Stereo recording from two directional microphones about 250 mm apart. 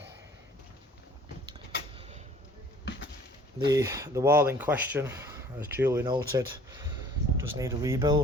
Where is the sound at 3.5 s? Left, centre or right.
Centre.